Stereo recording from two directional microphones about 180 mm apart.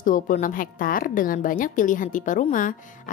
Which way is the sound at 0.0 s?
45° left (ahead or behind).